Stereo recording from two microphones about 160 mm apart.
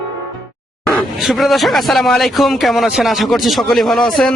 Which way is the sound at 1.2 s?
Centre (ahead or behind).